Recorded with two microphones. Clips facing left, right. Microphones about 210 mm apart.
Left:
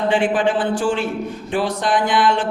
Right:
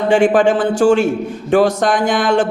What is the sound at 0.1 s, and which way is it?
A man's voice, 45° right (ahead or behind).